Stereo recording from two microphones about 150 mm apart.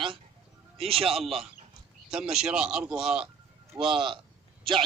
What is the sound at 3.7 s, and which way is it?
Speech, 35° right (ahead or behind).